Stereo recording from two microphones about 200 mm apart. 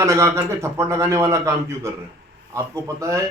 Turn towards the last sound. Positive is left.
turn(degrees=-15)  # may be behind; listen again after turning